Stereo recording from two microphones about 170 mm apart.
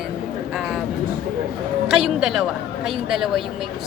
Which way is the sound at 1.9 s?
5° right (ahead or behind).